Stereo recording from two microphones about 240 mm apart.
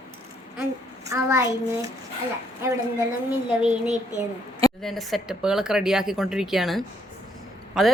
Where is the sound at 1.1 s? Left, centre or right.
Centre.